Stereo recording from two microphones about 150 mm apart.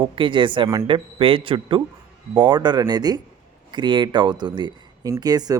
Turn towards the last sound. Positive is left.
turn(degrees=-25)  # may be behind; listen again after turning